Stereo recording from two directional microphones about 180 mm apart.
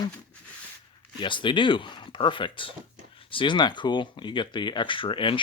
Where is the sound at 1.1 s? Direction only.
25° left (ahead or behind).